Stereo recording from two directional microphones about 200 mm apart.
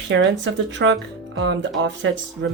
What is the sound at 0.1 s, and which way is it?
A woman's voice, 65° right (ahead or behind).